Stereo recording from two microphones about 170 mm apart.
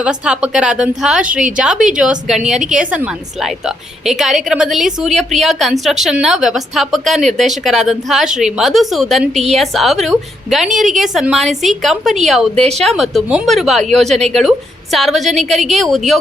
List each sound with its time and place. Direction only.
0.0 s a woman's voice: 5° right (ahead or behind)